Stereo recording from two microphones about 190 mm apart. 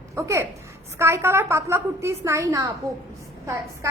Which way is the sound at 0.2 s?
15° right (ahead or behind).